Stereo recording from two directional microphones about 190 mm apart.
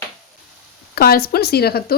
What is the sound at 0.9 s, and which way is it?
Speech, 55° left (ahead or behind).